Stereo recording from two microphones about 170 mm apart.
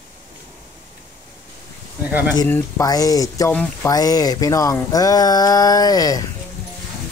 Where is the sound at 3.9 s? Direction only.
20° left (ahead or behind).